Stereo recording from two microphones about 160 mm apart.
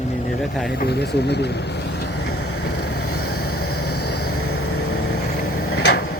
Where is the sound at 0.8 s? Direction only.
90° left.